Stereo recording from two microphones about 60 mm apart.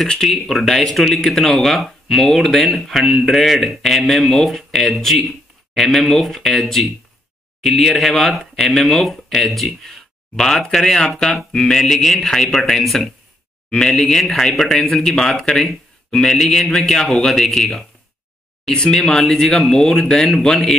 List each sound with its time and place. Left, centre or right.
0.0 s speech: centre